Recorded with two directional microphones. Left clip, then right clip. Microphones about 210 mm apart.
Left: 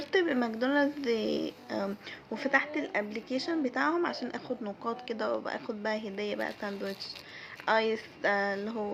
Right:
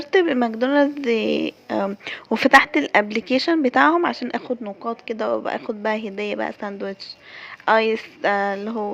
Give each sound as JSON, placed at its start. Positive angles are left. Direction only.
{"t": 0.1, "sound": "a woman's voice", "side_deg": -30}